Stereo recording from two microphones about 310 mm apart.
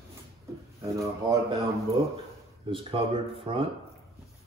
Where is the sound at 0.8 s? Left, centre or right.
Centre.